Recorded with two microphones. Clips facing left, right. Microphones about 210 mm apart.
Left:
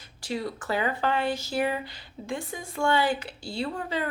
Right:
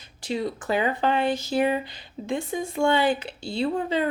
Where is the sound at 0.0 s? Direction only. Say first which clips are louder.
Right 4 dB; 20° right (ahead or behind).